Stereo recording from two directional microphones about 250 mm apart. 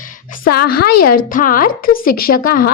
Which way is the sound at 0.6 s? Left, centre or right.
Left.